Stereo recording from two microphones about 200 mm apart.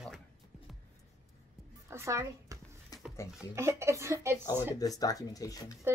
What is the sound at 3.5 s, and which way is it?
Speech, 15° right (ahead or behind).